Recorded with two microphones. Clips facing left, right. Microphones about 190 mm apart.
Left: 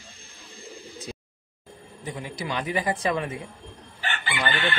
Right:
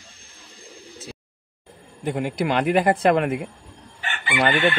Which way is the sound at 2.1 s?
60° right (ahead or behind).